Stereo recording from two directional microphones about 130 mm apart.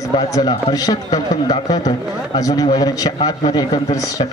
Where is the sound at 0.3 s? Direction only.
30° left (ahead or behind).